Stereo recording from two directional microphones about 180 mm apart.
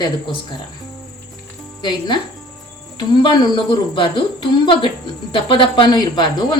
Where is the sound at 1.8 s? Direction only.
25° left (ahead or behind).